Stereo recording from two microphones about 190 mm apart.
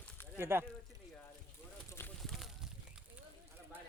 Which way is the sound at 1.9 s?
10° left (ahead or behind).